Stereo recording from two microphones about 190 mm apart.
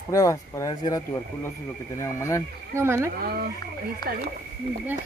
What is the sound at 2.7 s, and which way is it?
Speech, 15° right (ahead or behind).